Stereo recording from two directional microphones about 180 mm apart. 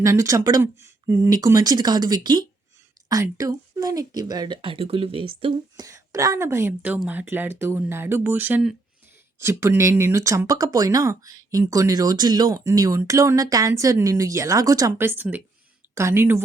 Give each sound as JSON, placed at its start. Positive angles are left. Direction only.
{"t": 0.0, "sound": "speech", "side_deg": -15}